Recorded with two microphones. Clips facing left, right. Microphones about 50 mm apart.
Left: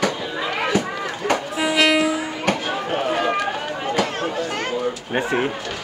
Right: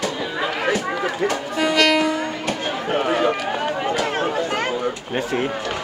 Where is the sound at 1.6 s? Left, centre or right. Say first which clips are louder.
Right 1 dB; centre.